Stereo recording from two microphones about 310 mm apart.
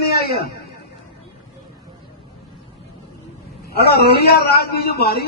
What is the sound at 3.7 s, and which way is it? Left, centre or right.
A man's voice, left.